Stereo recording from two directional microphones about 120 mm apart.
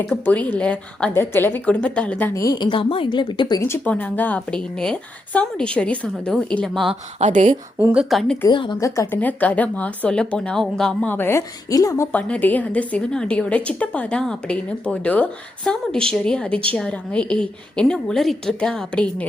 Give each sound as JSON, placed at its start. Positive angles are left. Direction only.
{"t": 0.1, "sound": "speech", "side_deg": 10}
{"t": 2.3, "sound": "a woman's voice", "side_deg": 30}
{"t": 2.6, "sound": "a woman's voice", "side_deg": 45}
{"t": 3.6, "sound": "speech", "side_deg": 15}
{"t": 7.2, "sound": "speech", "side_deg": -85}
{"t": 7.9, "sound": "speech", "side_deg": 0}
{"t": 8.4, "sound": "speech", "side_deg": 40}
{"t": 8.8, "sound": "a woman's voice", "side_deg": 25}
{"t": 9.2, "sound": "speech", "side_deg": 15}
{"t": 12.1, "sound": "speech", "side_deg": 15}